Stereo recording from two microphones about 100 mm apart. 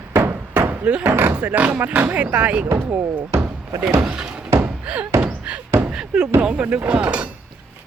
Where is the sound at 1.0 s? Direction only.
25° right (ahead or behind).